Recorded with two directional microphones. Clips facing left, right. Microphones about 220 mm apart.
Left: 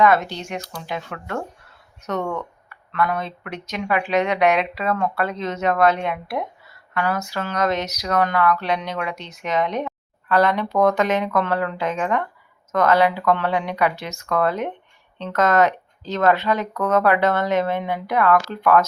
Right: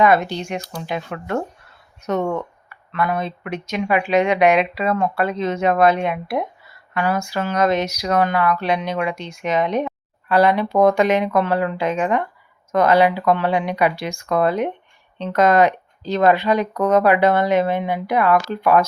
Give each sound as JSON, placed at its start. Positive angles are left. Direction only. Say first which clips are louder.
{"t": 0.0, "sound": "speech", "louder": "right 2 dB", "side_deg": -15}
{"t": 2.0, "sound": "speech", "louder": "right 4 dB", "side_deg": -10}